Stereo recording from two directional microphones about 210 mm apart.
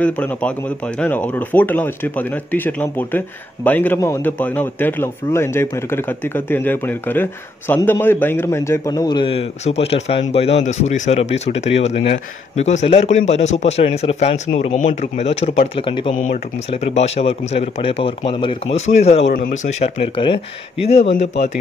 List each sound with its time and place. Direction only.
0.0 s a man's voice: 5° left (ahead or behind); by 21.5 s 35° left (ahead or behind)